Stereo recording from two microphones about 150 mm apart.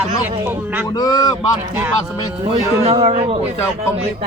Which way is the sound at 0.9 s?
25° left (ahead or behind).